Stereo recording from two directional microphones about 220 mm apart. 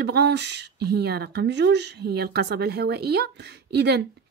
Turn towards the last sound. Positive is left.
turn(degrees=-50)  # may be behind; listen again after turning